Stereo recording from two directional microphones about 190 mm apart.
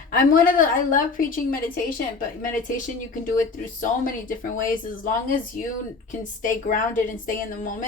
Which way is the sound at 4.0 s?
45° left (ahead or behind).